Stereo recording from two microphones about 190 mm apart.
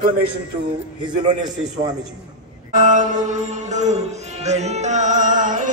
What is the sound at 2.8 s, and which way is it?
Music, 40° right (ahead or behind).